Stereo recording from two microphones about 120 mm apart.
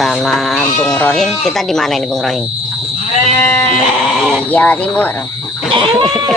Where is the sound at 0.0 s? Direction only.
Centre (ahead or behind).